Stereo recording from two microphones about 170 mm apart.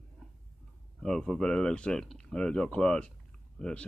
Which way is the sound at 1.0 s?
Centre (ahead or behind).